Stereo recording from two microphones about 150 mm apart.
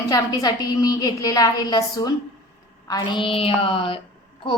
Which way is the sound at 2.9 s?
30° left (ahead or behind).